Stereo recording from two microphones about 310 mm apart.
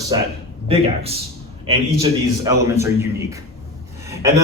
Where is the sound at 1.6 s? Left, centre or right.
Centre.